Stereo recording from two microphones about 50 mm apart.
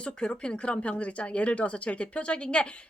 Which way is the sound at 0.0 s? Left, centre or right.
Left.